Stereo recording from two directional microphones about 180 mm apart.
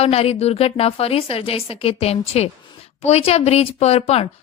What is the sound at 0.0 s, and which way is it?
A woman's voice, 35° left (ahead or behind).